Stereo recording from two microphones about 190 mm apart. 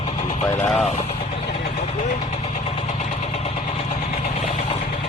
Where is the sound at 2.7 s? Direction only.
30° left (ahead or behind).